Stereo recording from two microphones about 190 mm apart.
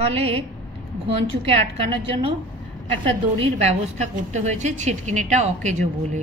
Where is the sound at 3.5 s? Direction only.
35° right (ahead or behind).